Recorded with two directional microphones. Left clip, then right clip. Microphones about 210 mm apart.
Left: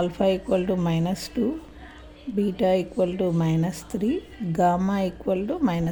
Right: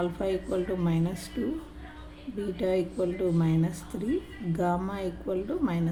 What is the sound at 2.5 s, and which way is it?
A woman's voice, 35° left (ahead or behind).